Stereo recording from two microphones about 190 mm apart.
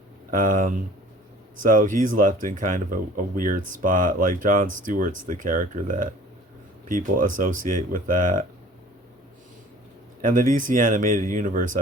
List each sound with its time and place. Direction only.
0.3 s speech: 45° right (ahead or behind)
10.2 s speech: 45° right (ahead or behind)